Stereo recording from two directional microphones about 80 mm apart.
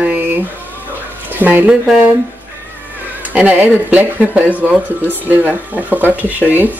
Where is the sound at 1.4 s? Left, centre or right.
Right.